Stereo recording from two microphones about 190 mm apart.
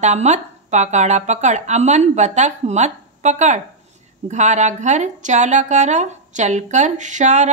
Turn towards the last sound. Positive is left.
turn(degrees=-40)  # may be behind; listen again after turning